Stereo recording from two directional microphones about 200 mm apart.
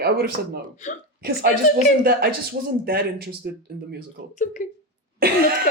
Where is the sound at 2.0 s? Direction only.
50° right (ahead or behind).